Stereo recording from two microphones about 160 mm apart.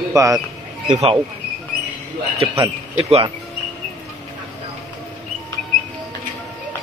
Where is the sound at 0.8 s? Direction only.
50° right (ahead or behind).